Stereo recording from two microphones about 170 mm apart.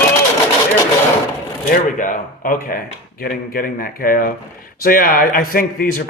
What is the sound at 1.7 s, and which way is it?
A man's voice, 50° left (ahead or behind).